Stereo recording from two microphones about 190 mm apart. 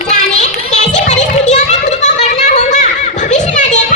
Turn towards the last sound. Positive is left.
turn(degrees=40)  # may be behind; listen again after turning